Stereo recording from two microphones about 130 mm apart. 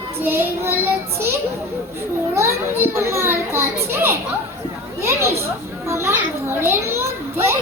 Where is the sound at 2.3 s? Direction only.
20° right (ahead or behind).